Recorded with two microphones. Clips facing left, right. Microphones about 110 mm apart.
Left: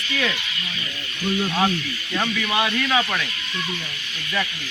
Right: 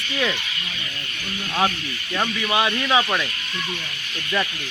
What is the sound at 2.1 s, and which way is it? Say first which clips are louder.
Speech: right 1 dB; 20° right (ahead or behind).